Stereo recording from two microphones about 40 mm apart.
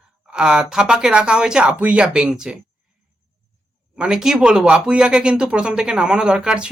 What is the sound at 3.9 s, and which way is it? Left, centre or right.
A man's voice, centre.